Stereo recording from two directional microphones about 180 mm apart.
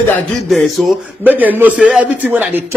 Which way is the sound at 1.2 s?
10° right (ahead or behind).